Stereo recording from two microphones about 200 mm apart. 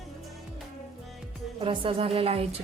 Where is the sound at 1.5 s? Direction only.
25° right (ahead or behind).